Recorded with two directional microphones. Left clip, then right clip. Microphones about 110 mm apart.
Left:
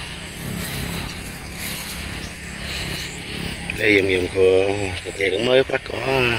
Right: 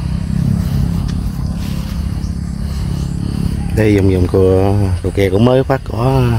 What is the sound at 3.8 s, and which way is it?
Speech, 45° right (ahead or behind).